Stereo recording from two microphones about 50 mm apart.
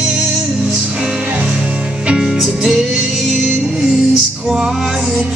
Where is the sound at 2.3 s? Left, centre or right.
Centre.